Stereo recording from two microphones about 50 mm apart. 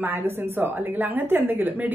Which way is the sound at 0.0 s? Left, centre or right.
Right.